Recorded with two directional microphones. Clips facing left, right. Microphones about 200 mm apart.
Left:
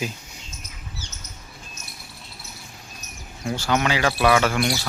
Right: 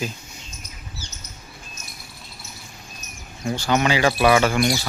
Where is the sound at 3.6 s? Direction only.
Centre (ahead or behind).